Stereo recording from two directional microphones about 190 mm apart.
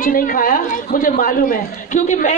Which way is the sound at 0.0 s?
50° left (ahead or behind).